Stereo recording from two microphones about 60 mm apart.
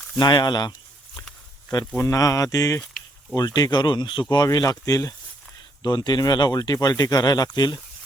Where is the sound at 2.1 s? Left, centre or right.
Left.